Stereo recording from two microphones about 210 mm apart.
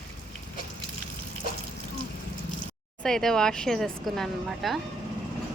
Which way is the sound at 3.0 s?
Centre (ahead or behind).